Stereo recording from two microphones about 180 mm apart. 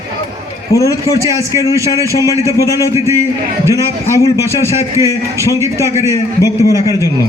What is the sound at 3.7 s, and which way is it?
Speech, 15° left (ahead or behind).